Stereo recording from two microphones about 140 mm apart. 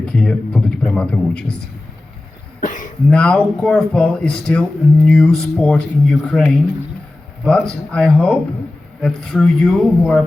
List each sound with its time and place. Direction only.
0.0 s speech: 5° left (ahead or behind)
2.6 s cough: 70° left (ahead or behind)
3.1 s speech: 5° left (ahead or behind)